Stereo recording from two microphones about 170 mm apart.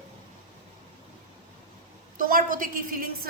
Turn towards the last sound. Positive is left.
turn(degrees=-60)  # may be behind; listen again after turning